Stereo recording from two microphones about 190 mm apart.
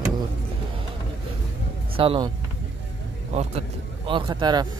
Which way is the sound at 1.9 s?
30° right (ahead or behind).